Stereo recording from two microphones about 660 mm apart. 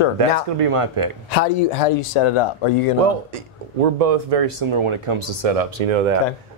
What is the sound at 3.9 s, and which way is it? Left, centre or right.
Speech, right.